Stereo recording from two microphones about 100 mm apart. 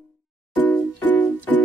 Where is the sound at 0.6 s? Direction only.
15° left (ahead or behind).